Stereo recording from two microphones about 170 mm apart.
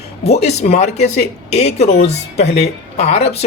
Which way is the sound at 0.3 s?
40° left (ahead or behind).